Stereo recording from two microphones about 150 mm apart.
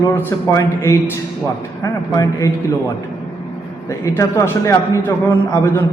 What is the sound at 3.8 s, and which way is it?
A man's voice, 20° left (ahead or behind).